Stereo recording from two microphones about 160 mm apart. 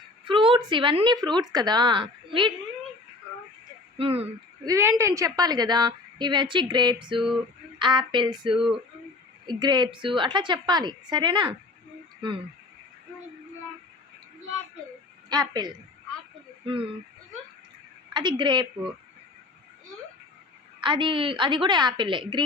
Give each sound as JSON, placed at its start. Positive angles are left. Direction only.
{"t": 0.3, "sound": "a woman's voice", "side_deg": -35}
{"t": 3.9, "sound": "speech", "side_deg": -35}
{"t": 4.6, "sound": "a woman's voice", "side_deg": -20}
{"t": 7.3, "sound": "a sound", "side_deg": -30}
{"t": 9.5, "sound": "a woman's voice", "side_deg": -25}
{"t": 15.3, "sound": "a woman's voice", "side_deg": -25}
{"t": 18.1, "sound": "a woman's voice", "side_deg": -30}
{"t": 20.8, "sound": "a woman's voice", "side_deg": -30}